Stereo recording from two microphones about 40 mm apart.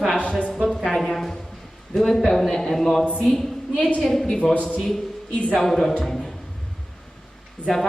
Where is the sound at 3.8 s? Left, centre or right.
Left.